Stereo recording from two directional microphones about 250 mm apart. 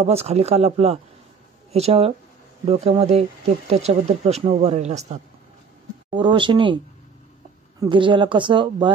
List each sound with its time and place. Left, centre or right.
0.0 s speech: right
7.8 s speech: centre